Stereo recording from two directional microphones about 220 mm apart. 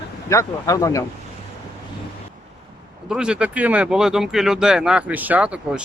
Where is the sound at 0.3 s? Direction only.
15° left (ahead or behind).